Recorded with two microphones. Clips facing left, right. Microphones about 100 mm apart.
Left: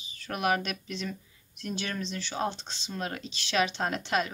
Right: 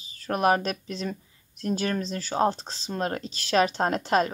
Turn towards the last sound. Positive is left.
turn(degrees=-40)  # may be behind; listen again after turning